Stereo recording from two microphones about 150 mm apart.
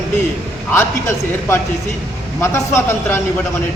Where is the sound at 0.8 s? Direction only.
15° left (ahead or behind).